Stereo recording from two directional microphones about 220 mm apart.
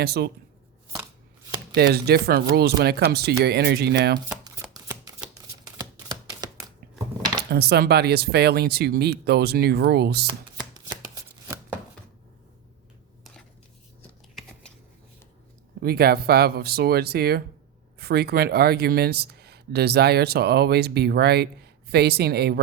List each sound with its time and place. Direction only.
0.0 s speech: 45° right (ahead or behind)
1.7 s speech: 45° right (ahead or behind)
4.7 s a sound: 15° right (ahead or behind)
5.6 s typewriter: 20° right (ahead or behind)
7.5 s speech: 45° right (ahead or behind)
10.2 s chopping: 20° right (ahead or behind)
15.8 s speech: 45° right (ahead or behind)